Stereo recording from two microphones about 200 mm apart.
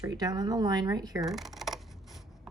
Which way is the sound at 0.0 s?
15° right (ahead or behind).